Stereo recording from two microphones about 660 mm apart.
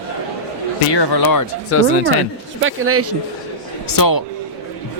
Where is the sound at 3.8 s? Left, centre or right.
Left.